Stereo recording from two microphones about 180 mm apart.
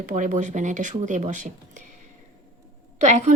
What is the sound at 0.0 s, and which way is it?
Speech, 50° right (ahead or behind).